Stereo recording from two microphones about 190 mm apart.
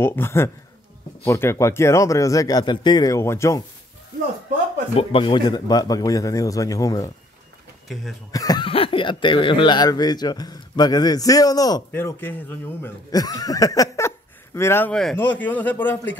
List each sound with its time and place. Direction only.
0.0 s speech: 10° left (ahead or behind)
4.9 s speech: 25° left (ahead or behind)
7.9 s speech: centre (ahead or behind)
8.3 s speech: 20° left (ahead or behind)